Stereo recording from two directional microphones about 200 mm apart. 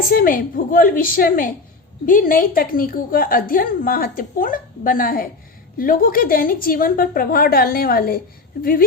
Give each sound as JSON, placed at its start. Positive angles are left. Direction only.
{"t": 0.1, "sound": "a woman's voice", "side_deg": 45}